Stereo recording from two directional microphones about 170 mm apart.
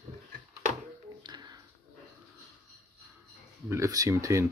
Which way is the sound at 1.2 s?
25° right (ahead or behind).